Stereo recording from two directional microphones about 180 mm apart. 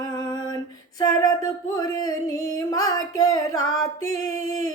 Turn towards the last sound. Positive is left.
turn(degrees=20)  # may be behind; listen again after turning